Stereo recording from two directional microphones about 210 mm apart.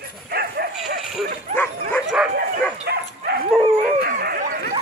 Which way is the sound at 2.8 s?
50° right (ahead or behind).